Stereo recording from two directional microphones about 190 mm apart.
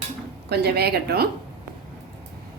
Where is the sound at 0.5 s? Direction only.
60° right (ahead or behind).